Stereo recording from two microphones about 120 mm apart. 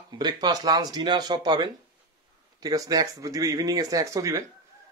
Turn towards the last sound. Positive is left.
turn(degrees=-25)  # may be behind; listen again after turning